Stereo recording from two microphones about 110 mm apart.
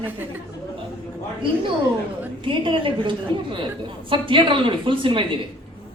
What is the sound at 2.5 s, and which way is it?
Speech, 50° right (ahead or behind).